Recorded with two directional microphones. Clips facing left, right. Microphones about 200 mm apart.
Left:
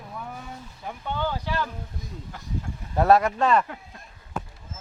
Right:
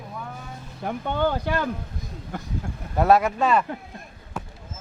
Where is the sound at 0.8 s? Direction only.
60° right (ahead or behind).